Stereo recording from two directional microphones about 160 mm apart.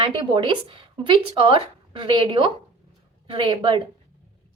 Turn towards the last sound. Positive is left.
turn(degrees=-30)  # may be behind; listen again after turning